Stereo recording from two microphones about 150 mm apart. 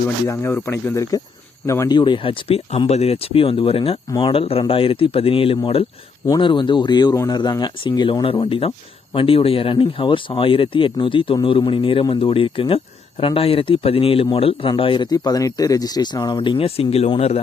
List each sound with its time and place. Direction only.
0.3 s speech: 15° left (ahead or behind)
2.0 s speech: 30° left (ahead or behind)